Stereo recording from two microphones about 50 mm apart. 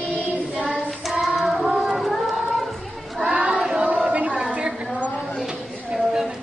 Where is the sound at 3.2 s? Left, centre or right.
Right.